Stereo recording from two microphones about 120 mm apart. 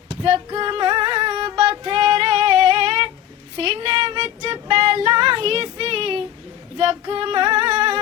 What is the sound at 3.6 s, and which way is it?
Child singing, 45° right (ahead or behind).